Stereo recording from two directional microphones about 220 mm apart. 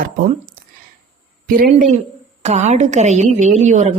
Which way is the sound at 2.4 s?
30° right (ahead or behind).